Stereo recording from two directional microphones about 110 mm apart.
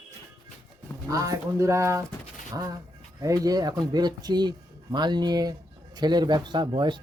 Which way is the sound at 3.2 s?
30° right (ahead or behind).